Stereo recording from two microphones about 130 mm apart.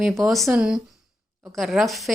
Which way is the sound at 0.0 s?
Centre (ahead or behind).